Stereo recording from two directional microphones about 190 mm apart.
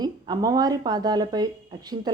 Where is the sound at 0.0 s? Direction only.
20° right (ahead or behind).